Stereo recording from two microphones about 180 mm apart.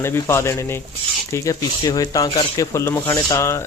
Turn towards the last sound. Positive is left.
turn(degrees=15)  # may be behind; listen again after turning